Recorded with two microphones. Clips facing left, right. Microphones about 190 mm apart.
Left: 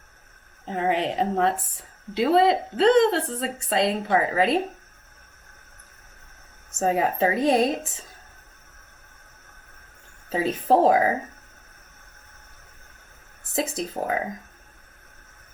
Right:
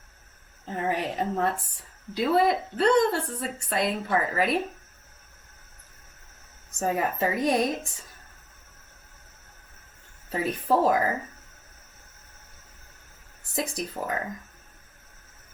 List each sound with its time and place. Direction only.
0.6 s a woman's voice: 25° left (ahead or behind)
6.7 s a woman's voice: 25° left (ahead or behind)
10.2 s a woman's voice: 25° left (ahead or behind)
13.6 s a woman's voice: 25° left (ahead or behind)